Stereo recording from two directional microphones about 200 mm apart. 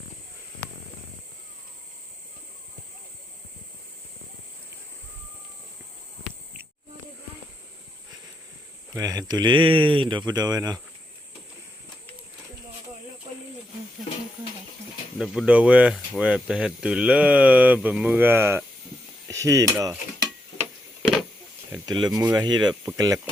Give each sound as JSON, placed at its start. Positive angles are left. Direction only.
{"t": 8.9, "sound": "speech", "side_deg": -20}
{"t": 15.2, "sound": "speech", "side_deg": 0}
{"t": 19.3, "sound": "cutlery", "side_deg": -15}
{"t": 21.8, "sound": "speech", "side_deg": -20}